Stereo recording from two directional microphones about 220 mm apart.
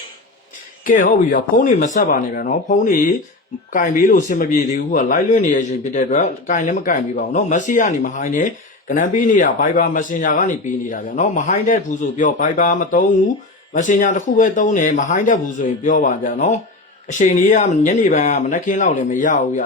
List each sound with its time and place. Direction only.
0.9 s a man's voice: 35° left (ahead or behind)